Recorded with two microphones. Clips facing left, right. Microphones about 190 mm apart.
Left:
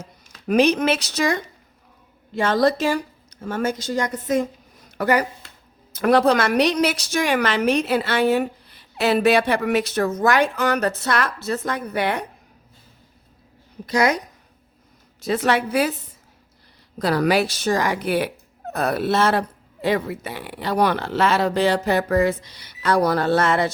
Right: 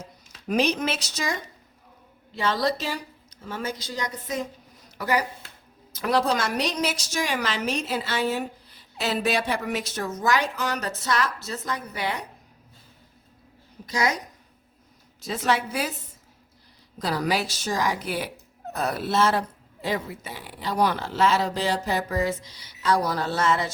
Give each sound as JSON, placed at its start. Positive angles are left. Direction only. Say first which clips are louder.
{"t": 0.4, "sound": "a woman's voice", "louder": "left 7 dB", "side_deg": 60}
{"t": 2.3, "sound": "a woman's voice", "louder": "left 6 dB", "side_deg": 50}
{"t": 13.8, "sound": "a woman's voice", "louder": "left 6 dB", "side_deg": 60}
{"t": 15.2, "sound": "a woman's voice", "louder": "left 5 dB", "side_deg": 65}
{"t": 17.0, "sound": "a woman's voice", "louder": "left 7 dB", "side_deg": 65}